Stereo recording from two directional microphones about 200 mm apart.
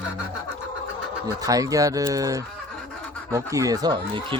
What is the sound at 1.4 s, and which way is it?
Speech, 15° right (ahead or behind).